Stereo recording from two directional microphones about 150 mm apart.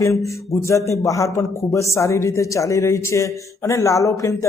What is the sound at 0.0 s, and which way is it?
Speech, 20° left (ahead or behind).